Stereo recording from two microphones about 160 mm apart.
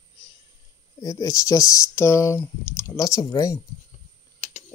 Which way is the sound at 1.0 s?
20° left (ahead or behind).